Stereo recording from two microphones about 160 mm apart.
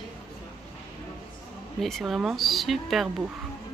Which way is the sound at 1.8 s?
Centre (ahead or behind).